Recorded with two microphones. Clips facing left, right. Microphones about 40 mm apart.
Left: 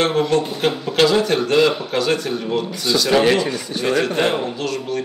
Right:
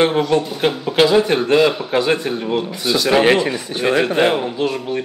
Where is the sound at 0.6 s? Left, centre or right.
Centre.